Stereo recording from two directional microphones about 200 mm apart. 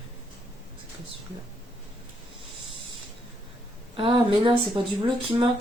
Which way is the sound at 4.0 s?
25° right (ahead or behind).